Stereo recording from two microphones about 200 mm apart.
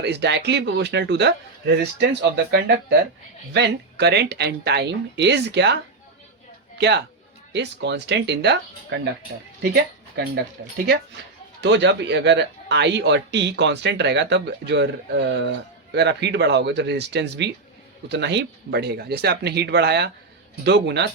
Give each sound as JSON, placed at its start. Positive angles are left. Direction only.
{"t": 0.0, "sound": "a man's voice", "side_deg": -60}
{"t": 6.7, "sound": "a man's voice", "side_deg": -60}
{"t": 11.6, "sound": "a man's voice", "side_deg": -60}